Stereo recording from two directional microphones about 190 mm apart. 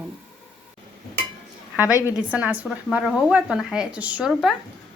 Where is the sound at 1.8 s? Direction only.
15° left (ahead or behind).